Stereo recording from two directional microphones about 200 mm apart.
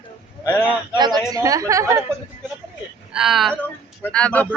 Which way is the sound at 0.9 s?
20° right (ahead or behind).